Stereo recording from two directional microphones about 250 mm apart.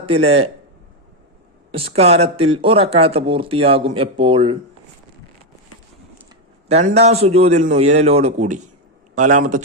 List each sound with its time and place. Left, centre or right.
0.0 s speech: right
1.7 s speech: right
6.7 s a man's voice: right